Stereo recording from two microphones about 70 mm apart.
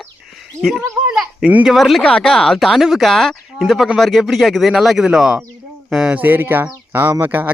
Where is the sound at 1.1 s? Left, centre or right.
Centre.